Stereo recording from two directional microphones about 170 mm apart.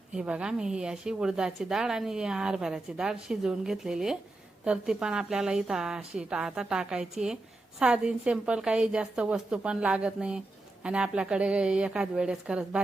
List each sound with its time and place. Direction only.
0.1 s a woman's voice: 5° right (ahead or behind)